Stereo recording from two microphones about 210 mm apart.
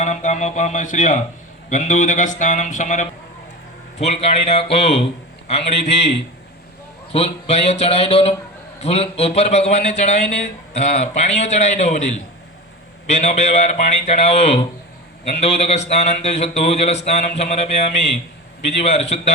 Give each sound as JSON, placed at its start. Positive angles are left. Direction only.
{"t": 0.0, "sound": "a man's voice", "side_deg": 35}